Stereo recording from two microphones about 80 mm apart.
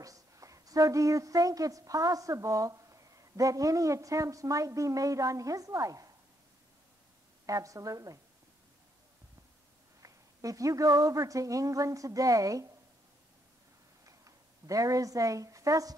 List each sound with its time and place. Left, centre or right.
0.0 s a woman's voice: right
7.4 s a woman's voice: right
10.0 s a woman's voice: right
14.0 s a sound: right